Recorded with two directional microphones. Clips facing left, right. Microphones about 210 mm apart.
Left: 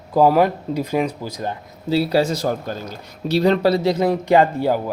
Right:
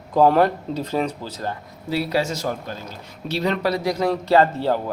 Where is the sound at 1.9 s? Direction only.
30° left (ahead or behind).